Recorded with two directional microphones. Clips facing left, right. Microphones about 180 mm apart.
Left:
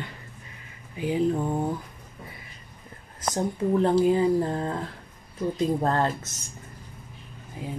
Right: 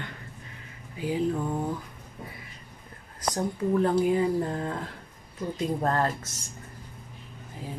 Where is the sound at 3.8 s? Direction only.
30° left (ahead or behind).